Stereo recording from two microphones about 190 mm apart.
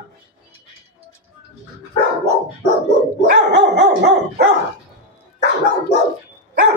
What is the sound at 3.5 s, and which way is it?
Dog, 60° right (ahead or behind).